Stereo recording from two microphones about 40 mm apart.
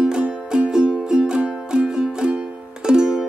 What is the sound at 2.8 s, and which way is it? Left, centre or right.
Music, right.